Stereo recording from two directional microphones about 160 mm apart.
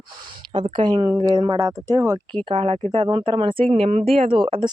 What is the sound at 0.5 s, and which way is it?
Speech, 30° right (ahead or behind).